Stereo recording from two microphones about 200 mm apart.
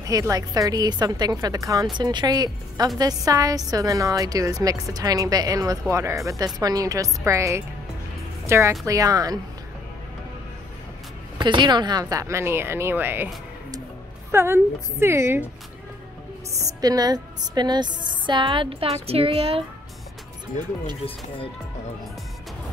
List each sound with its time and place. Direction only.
0.0 s a woman's voice: 15° right (ahead or behind)
11.3 s a woman's voice: 25° right (ahead or behind)
16.5 s a woman's voice: 20° right (ahead or behind)